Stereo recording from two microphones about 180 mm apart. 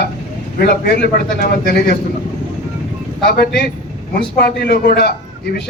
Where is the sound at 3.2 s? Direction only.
60° left (ahead or behind).